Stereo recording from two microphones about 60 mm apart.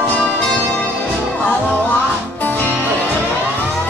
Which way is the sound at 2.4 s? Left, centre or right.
Left.